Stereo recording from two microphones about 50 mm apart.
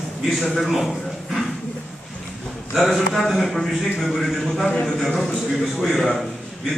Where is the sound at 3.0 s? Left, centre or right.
Centre.